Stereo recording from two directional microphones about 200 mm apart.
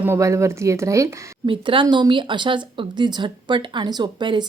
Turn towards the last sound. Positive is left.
turn(degrees=-20)  # may be behind; listen again after turning